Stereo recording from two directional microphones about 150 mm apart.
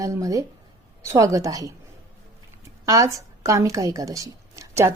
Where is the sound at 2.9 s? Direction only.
20° right (ahead or behind).